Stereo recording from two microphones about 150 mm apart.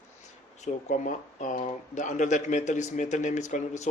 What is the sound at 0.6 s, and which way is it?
Speech, 55° left (ahead or behind).